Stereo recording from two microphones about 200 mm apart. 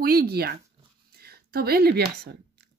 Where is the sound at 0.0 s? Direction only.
50° right (ahead or behind).